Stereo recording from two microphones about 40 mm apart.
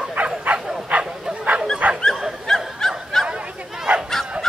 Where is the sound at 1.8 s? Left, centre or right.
Right.